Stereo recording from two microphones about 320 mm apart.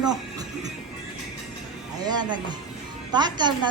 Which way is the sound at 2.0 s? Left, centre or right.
Centre.